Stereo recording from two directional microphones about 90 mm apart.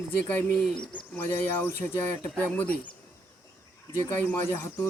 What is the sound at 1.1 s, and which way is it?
Speech, 25° left (ahead or behind).